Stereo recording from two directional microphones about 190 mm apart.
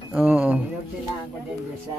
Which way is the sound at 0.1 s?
10° right (ahead or behind).